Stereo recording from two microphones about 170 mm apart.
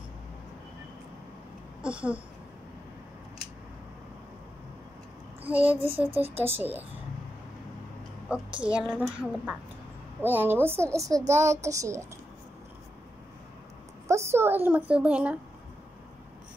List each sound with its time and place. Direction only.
1.8 s speech: 5° right (ahead or behind)
5.4 s a child's voice: 10° right (ahead or behind)
8.3 s a woman's voice: 5° right (ahead or behind)
14.0 s a woman's voice: 15° right (ahead or behind)